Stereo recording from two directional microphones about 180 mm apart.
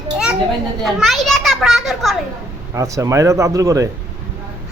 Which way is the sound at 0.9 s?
Centre (ahead or behind).